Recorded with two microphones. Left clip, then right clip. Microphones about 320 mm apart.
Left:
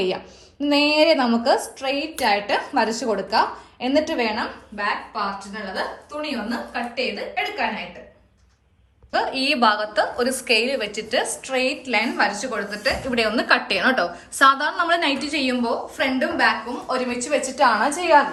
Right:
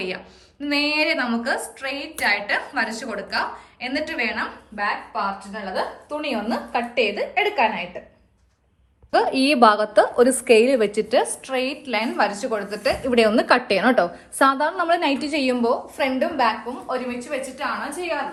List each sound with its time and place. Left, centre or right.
0.6 s a woman's voice: centre
9.1 s a woman's voice: centre
16.9 s a woman's voice: centre